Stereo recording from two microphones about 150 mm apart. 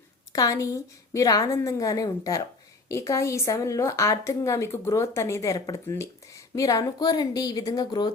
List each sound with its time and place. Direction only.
0.3 s a woman's voice: 20° left (ahead or behind)